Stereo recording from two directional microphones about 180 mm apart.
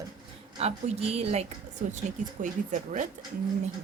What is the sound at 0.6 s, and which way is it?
Speech, 35° right (ahead or behind).